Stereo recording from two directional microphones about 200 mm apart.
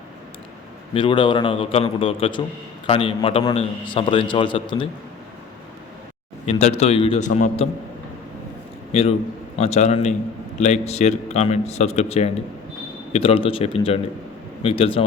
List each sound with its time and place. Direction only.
0.9 s a man's voice: 25° left (ahead or behind)
6.4 s a man's voice: 35° left (ahead or behind)
8.9 s a man's voice: 30° left (ahead or behind)